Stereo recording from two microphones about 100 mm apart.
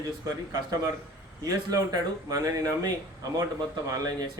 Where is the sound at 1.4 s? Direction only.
40° right (ahead or behind).